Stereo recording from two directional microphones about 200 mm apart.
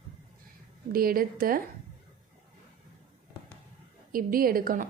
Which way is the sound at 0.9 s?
45° right (ahead or behind).